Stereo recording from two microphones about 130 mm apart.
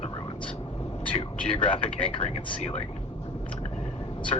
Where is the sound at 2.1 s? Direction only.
55° left (ahead or behind).